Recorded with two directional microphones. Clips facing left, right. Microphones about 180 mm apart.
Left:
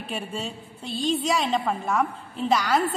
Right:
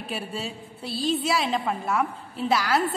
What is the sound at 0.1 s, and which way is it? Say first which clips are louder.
A woman's voice: left 1 dB; 5° right (ahead or behind).